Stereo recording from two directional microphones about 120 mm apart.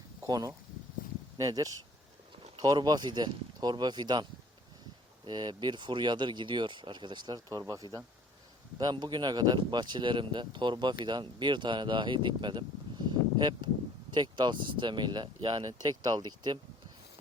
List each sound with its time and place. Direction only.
0.3 s speech: 30° right (ahead or behind)